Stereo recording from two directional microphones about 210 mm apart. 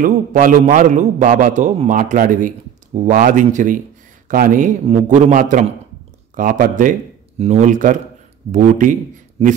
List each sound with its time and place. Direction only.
0.0 s a man's voice: 40° right (ahead or behind)